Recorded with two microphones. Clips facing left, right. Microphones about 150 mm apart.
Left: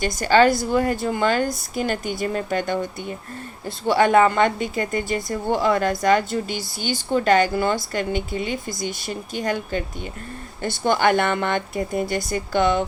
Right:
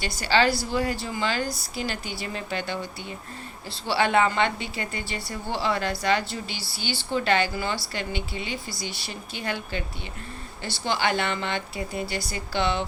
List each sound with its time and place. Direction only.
0.0 s a woman's voice: 45° left (ahead or behind)